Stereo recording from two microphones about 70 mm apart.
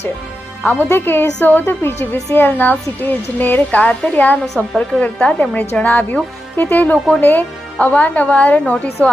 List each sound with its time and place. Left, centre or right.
0.6 s a woman's voice: left